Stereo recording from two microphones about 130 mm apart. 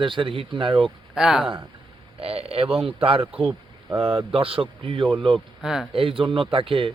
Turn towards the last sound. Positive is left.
turn(degrees=-40)  # may be behind; listen again after turning